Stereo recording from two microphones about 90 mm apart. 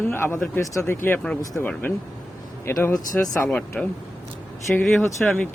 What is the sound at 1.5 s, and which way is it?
Speech, 10° left (ahead or behind).